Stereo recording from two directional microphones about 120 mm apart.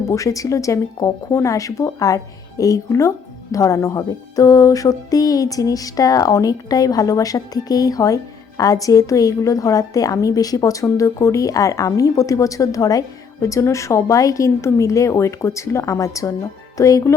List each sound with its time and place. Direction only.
0.1 s speech: 25° left (ahead or behind)